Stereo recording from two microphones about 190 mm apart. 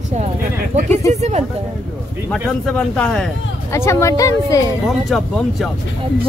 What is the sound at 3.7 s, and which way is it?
Speech, 15° left (ahead or behind).